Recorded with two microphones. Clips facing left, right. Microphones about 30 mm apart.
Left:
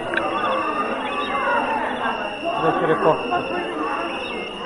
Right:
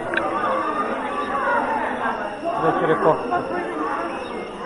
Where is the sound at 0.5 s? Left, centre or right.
Left.